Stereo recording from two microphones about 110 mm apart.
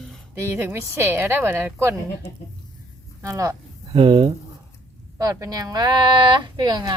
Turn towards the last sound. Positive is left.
turn(degrees=-40)  # may be behind; listen again after turning